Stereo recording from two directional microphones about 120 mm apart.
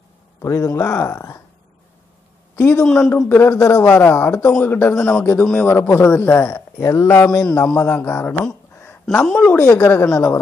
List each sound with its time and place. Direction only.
0.4 s speech: 25° left (ahead or behind)
2.5 s a man's voice: 20° left (ahead or behind)